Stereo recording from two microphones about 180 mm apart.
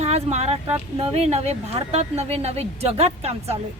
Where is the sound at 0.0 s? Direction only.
35° right (ahead or behind).